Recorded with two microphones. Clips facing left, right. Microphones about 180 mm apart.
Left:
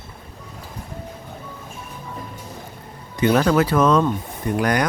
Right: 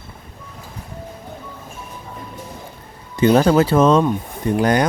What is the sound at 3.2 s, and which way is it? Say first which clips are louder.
Speech: right 4 dB; 30° right (ahead or behind).